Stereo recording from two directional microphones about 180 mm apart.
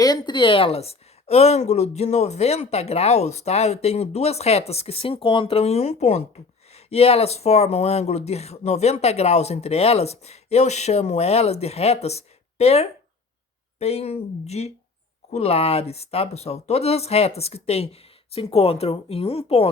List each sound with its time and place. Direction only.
0.0 s speech: 25° left (ahead or behind)